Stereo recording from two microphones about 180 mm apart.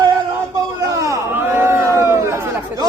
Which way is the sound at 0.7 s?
20° right (ahead or behind).